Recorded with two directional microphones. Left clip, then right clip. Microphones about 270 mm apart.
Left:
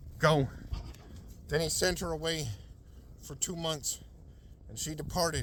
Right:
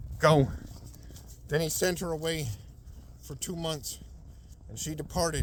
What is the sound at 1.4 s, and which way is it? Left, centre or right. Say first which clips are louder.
Speech: right 1 dB; left.